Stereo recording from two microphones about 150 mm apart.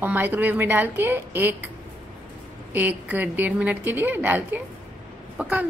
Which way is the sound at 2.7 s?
10° right (ahead or behind).